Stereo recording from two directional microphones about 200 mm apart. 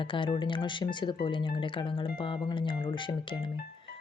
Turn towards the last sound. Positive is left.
turn(degrees=25)  # may be behind; listen again after turning